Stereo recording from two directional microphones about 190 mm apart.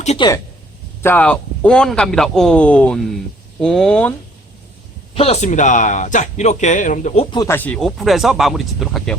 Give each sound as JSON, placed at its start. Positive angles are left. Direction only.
{"t": 0.2, "sound": "speech", "side_deg": 20}
{"t": 1.0, "sound": "speech", "side_deg": 10}
{"t": 5.1, "sound": "speech", "side_deg": 30}
{"t": 7.3, "sound": "speech", "side_deg": 15}